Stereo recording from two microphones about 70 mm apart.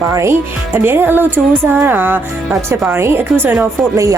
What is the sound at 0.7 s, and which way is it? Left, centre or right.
A woman's voice, right.